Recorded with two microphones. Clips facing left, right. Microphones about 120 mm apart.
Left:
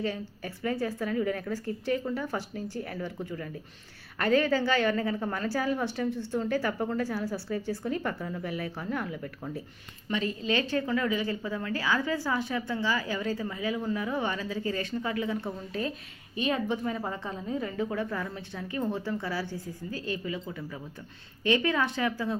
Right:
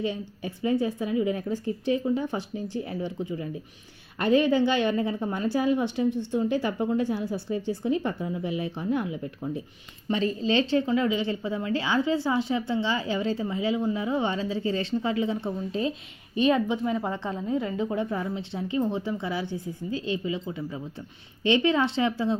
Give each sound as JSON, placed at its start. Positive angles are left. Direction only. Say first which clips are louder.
{"t": 0.0, "sound": "a woman's voice", "louder": "right 3 dB", "side_deg": -20}
{"t": 16.6, "sound": "a woman's voice", "louder": "right 4 dB", "side_deg": -15}
{"t": 17.1, "sound": "a woman's voice", "louder": "right 5 dB", "side_deg": -25}